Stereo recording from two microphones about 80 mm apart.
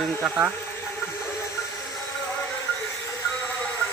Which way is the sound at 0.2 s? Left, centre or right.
Right.